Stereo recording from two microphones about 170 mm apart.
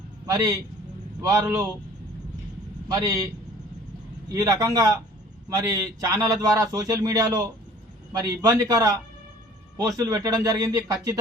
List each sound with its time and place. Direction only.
0.3 s a man's voice: 20° right (ahead or behind)
2.9 s a man's voice: 20° right (ahead or behind)
4.3 s a man's voice: 20° right (ahead or behind)